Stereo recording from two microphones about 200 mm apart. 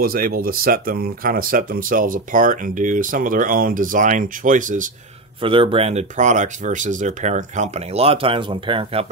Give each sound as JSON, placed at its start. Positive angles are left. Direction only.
{"t": 0.0, "sound": "speech", "side_deg": -45}
{"t": 5.4, "sound": "speech", "side_deg": -25}